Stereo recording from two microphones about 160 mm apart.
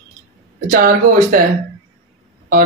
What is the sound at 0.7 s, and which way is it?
Speech, 60° right (ahead or behind).